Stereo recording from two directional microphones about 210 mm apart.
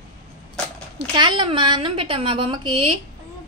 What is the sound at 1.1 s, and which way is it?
A woman's voice, 20° right (ahead or behind).